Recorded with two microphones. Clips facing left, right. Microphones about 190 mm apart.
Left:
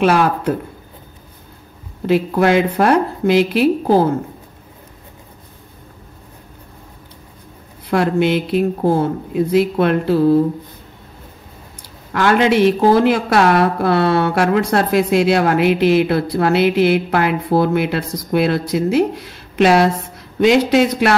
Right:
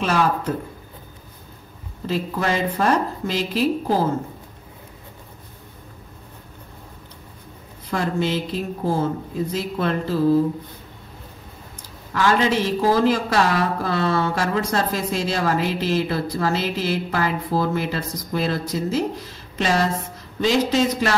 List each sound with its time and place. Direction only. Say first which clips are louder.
0.0 s speech: left 6 dB; 65° left (ahead or behind)
2.0 s speech: left 9 dB; 65° left (ahead or behind)
7.9 s speech: left 7 dB; 65° left (ahead or behind)
12.1 s speech: left 5 dB; 65° left (ahead or behind)